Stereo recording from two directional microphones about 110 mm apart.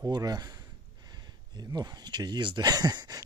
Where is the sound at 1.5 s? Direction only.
40° right (ahead or behind).